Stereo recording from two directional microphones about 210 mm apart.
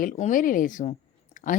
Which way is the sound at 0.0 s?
40° left (ahead or behind).